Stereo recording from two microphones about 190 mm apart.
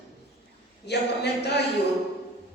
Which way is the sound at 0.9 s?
60° left (ahead or behind).